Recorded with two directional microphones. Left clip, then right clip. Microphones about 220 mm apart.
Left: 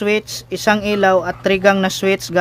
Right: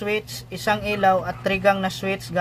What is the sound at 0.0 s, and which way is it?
Speech, 45° left (ahead or behind).